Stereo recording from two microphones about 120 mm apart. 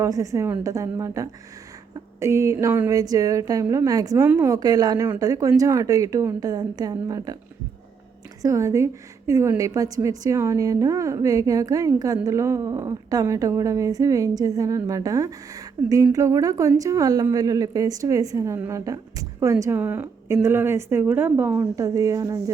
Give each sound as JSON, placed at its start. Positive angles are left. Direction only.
{"t": 0.0, "sound": "a woman's voice", "side_deg": -25}
{"t": 8.4, "sound": "a woman's voice", "side_deg": -30}